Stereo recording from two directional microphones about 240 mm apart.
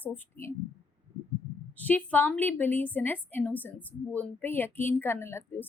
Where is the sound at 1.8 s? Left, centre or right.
Centre.